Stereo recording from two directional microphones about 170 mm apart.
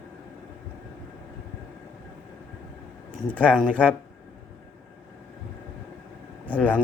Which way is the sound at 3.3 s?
10° left (ahead or behind).